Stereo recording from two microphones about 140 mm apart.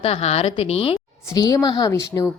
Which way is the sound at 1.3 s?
25° left (ahead or behind).